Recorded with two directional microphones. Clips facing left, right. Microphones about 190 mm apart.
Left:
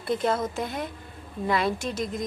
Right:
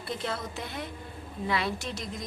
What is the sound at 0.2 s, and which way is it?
A woman's voice, 45° left (ahead or behind).